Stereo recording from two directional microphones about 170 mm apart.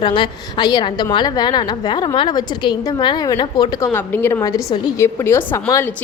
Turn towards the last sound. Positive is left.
turn(degrees=15)  # may be behind; listen again after turning